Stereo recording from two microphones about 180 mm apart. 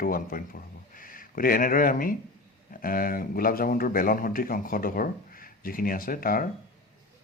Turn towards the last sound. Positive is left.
turn(degrees=50)  # may be behind; listen again after turning